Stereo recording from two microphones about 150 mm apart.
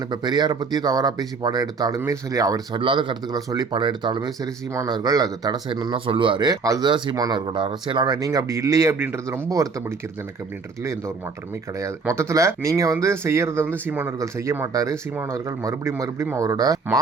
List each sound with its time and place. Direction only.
0.1 s speech: 30° right (ahead or behind)
11.8 s speech: 20° right (ahead or behind)